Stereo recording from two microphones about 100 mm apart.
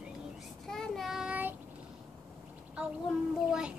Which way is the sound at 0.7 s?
5° left (ahead or behind).